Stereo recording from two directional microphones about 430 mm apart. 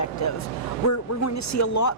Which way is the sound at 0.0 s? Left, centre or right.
Left.